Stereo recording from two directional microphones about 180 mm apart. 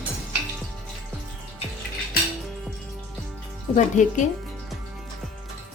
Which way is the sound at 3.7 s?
45° left (ahead or behind).